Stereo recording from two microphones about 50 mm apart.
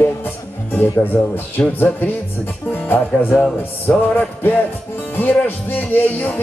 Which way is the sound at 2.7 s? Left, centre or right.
Left.